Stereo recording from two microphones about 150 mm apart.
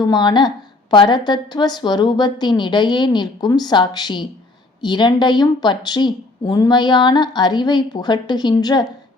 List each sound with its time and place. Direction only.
0.0 s a woman's voice: 30° left (ahead or behind)